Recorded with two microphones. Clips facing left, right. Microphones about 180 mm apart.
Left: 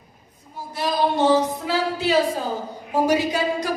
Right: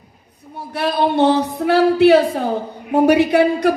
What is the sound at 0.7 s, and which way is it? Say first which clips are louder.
A woman's voice: right 5 dB; 65° right (ahead or behind).